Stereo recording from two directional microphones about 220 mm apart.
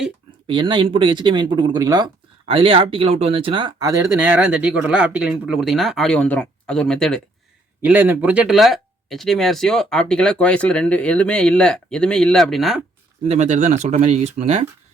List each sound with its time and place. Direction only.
0.4 s speech: 20° right (ahead or behind); by 7.2 s centre (ahead or behind)
7.8 s speech: 10° right (ahead or behind)
13.2 s speech: 30° right (ahead or behind)